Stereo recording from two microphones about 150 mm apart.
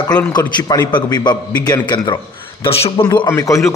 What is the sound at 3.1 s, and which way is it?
Speech, 20° left (ahead or behind).